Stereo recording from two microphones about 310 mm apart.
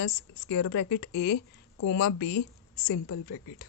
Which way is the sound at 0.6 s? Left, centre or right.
Left.